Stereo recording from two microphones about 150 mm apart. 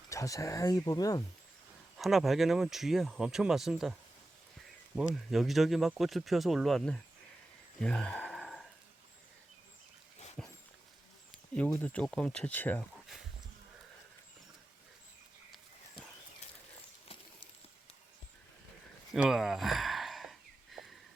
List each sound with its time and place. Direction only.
0.1 s speech: 20° left (ahead or behind)
2.0 s speech: centre (ahead or behind)
4.9 s speech: centre (ahead or behind)
7.8 s a sound: 5° left (ahead or behind)
10.4 s dog: 5° left (ahead or behind)
11.5 s speech: 5° left (ahead or behind)
19.1 s a sound: 5° right (ahead or behind)